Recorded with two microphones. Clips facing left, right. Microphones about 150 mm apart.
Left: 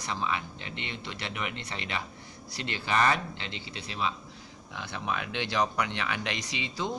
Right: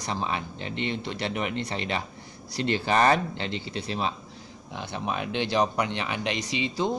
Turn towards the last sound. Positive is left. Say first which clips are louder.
# right 6 dB
turn(degrees=-25)  # may be behind; listen again after turning